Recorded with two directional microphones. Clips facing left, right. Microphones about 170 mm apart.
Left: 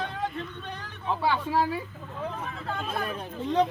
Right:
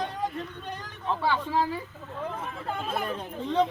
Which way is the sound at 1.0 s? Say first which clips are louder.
Left 1 dB; 5° left (ahead or behind).